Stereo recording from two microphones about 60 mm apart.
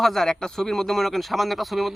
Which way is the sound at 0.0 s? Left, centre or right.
Centre.